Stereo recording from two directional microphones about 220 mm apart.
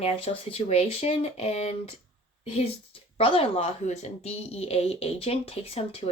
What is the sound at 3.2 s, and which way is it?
Speech, 25° left (ahead or behind).